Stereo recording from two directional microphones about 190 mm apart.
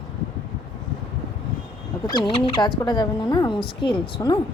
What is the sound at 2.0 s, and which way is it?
Speech, 25° left (ahead or behind).